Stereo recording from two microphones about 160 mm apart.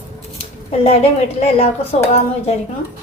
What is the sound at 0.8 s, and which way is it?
A woman's voice, 40° left (ahead or behind).